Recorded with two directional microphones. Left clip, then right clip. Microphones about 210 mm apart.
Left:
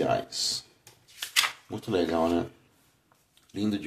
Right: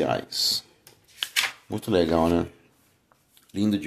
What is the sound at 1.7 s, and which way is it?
Speech, 35° right (ahead or behind).